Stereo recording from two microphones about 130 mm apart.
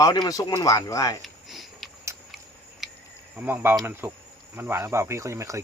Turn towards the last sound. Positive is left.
turn(degrees=-25)  # may be behind; listen again after turning